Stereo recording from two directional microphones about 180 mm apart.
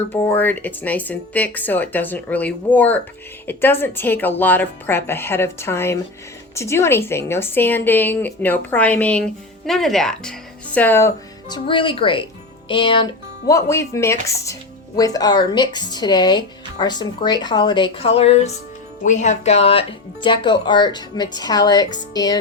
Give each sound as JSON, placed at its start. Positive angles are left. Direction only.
{"t": 0.1, "sound": "speech", "side_deg": 10}
{"t": 11.4, "sound": "speech", "side_deg": 25}
{"t": 13.5, "sound": "speech", "side_deg": 15}